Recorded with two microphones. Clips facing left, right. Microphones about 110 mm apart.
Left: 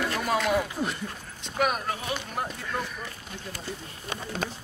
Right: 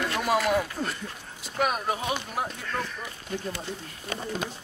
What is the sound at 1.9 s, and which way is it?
Speech, 20° right (ahead or behind).